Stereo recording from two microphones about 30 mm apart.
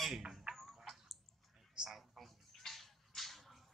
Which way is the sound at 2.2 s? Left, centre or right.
Centre.